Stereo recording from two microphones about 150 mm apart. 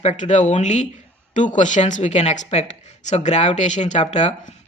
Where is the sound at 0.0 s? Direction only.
50° left (ahead or behind).